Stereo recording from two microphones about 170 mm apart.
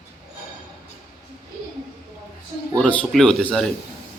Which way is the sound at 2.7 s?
5° left (ahead or behind).